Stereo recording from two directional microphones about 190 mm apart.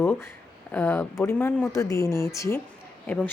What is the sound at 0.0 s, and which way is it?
Speech, 10° left (ahead or behind).